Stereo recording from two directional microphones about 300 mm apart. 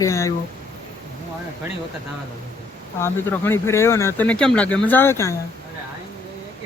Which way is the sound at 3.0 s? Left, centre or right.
Centre.